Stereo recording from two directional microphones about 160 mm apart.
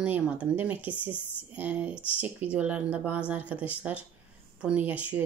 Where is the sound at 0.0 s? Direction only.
10° right (ahead or behind).